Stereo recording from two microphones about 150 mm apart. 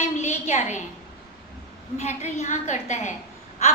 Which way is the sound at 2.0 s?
50° left (ahead or behind).